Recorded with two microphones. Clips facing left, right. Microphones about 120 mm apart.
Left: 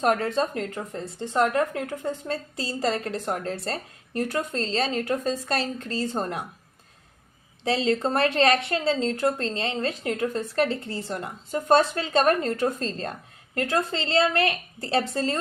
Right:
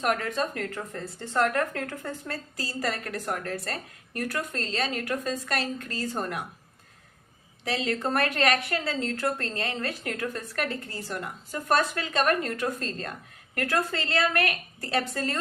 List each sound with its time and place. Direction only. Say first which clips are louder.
0.0 s a woman's voice: left 4 dB; 30° left (ahead or behind)
7.6 s a woman's voice: left 5 dB; 30° left (ahead or behind)